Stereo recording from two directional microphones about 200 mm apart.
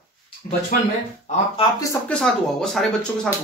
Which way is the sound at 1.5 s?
20° left (ahead or behind).